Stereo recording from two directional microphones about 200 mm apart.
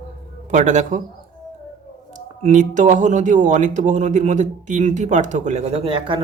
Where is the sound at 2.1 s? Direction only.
40° right (ahead or behind).